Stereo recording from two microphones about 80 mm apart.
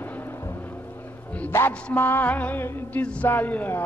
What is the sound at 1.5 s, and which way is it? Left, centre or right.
Speech, left.